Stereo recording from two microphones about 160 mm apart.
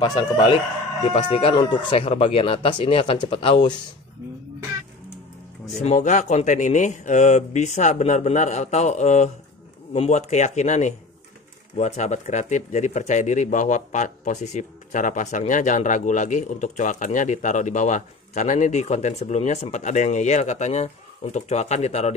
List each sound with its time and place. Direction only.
0.0 s speech: 25° left (ahead or behind)
5.7 s speech: 45° left (ahead or behind)